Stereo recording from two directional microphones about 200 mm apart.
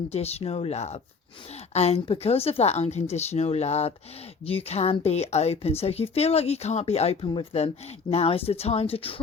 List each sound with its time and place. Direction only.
0.1 s speech: 30° left (ahead or behind)